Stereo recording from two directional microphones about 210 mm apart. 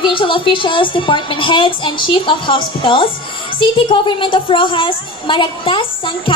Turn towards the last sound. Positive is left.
turn(degrees=25)  # may be behind; listen again after turning